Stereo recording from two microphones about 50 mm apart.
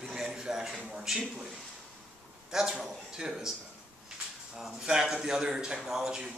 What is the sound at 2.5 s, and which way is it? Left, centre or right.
A man's voice, centre.